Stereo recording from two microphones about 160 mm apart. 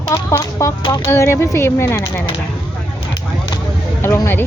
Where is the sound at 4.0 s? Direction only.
15° left (ahead or behind).